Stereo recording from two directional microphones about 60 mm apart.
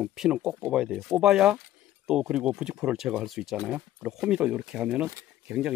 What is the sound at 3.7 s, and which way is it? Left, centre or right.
Speech, right.